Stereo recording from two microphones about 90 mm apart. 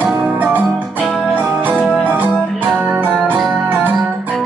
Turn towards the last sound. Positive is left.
turn(degrees=-20)  # may be behind; listen again after turning